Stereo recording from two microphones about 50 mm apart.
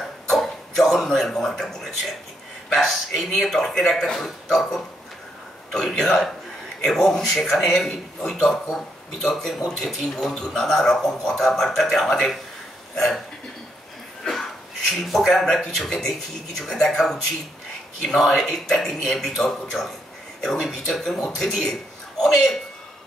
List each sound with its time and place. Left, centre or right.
0.3 s speech: centre
14.9 s speech: centre